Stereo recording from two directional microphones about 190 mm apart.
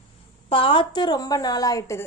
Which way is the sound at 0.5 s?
25° left (ahead or behind).